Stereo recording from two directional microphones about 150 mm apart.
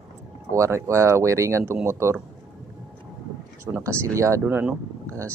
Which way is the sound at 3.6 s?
20° right (ahead or behind).